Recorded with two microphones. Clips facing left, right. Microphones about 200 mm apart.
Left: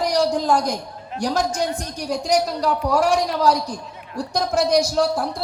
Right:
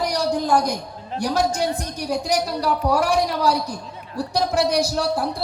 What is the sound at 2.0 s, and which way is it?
A woman's voice, 60° right (ahead or behind).